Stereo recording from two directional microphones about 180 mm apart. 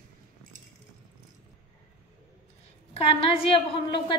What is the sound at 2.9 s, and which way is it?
A woman's voice, 30° left (ahead or behind).